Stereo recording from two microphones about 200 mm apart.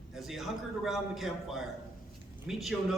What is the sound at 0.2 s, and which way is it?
A man's voice, centre (ahead or behind).